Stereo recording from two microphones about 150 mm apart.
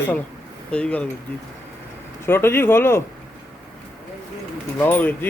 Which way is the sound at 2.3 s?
15° left (ahead or behind).